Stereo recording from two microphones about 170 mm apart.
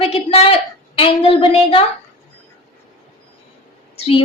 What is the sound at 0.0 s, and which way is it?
A woman's voice, 35° left (ahead or behind).